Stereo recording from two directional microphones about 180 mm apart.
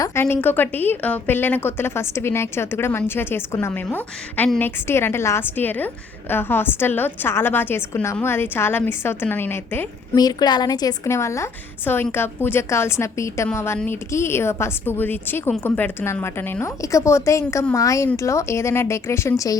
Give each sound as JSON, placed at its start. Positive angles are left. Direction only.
{"t": 0.0, "sound": "a woman's voice", "side_deg": 15}